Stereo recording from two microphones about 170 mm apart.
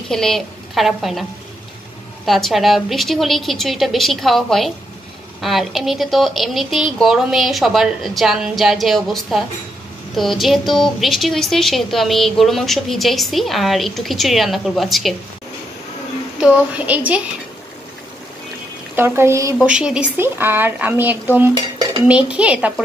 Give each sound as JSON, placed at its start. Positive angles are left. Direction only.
{"t": 0.1, "sound": "a woman's voice", "side_deg": 0}
{"t": 2.2, "sound": "a woman's voice", "side_deg": 0}
{"t": 16.3, "sound": "speech", "side_deg": -5}
{"t": 18.9, "sound": "speech", "side_deg": -15}
{"t": 19.7, "sound": "speech", "side_deg": -5}
{"t": 21.5, "sound": "dishes", "side_deg": -25}
{"t": 22.0, "sound": "speech", "side_deg": -5}